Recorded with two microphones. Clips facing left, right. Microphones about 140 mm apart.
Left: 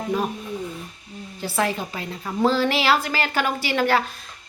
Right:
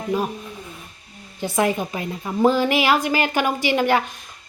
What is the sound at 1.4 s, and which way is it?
A woman's voice, 15° right (ahead or behind).